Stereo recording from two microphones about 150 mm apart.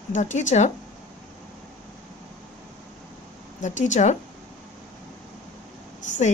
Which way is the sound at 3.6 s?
55° left (ahead or behind).